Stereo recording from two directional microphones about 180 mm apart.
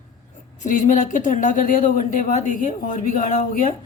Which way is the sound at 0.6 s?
45° left (ahead or behind).